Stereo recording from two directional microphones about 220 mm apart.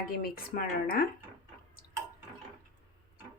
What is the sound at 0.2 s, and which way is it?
Speech, 45° left (ahead or behind).